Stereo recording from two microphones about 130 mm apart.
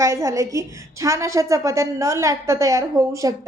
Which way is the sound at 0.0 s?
25° right (ahead or behind).